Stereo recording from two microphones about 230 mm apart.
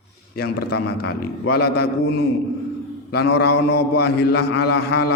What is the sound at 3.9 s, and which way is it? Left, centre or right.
A man's voice, left.